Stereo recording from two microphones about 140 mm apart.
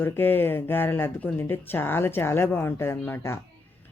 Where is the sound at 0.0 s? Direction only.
15° left (ahead or behind).